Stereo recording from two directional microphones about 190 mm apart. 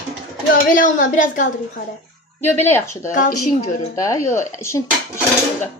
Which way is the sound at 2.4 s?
10° left (ahead or behind).